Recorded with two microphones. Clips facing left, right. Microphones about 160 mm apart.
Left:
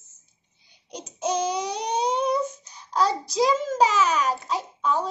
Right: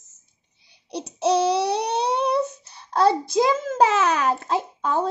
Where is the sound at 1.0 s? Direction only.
70° right (ahead or behind).